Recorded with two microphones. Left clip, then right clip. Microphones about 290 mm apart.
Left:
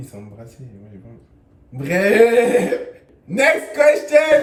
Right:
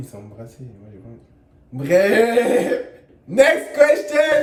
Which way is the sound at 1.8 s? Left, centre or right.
Centre.